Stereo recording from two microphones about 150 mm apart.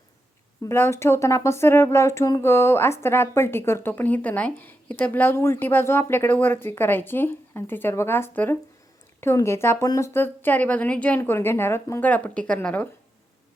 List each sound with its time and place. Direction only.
0.6 s speech: 15° left (ahead or behind)